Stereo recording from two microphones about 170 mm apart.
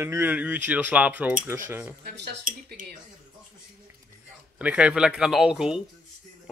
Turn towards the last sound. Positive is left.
turn(degrees=-5)  # may be behind; listen again after turning